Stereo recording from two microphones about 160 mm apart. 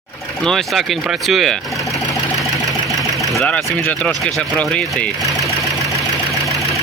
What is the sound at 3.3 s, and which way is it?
Speech, centre (ahead or behind).